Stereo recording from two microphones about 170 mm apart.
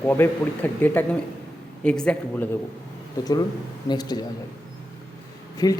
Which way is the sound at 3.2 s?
25° left (ahead or behind).